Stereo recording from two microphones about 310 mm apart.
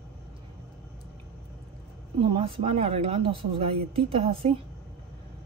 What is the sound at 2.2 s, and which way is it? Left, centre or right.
Speech, centre.